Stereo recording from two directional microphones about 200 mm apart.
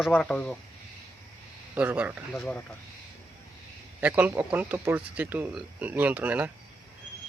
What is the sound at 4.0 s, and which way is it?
Speech, 10° right (ahead or behind).